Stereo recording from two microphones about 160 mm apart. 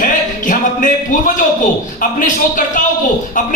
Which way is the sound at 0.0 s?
55° left (ahead or behind).